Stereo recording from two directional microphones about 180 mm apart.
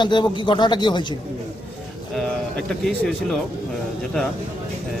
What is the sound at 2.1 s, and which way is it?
Speech, centre (ahead or behind).